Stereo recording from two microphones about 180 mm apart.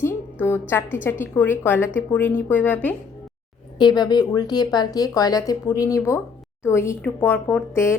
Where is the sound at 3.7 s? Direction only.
25° left (ahead or behind).